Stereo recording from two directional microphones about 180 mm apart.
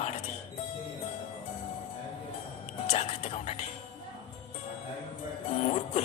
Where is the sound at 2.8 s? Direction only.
35° left (ahead or behind).